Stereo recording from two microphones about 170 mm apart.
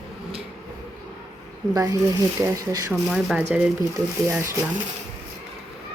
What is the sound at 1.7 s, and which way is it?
Speech, 20° right (ahead or behind).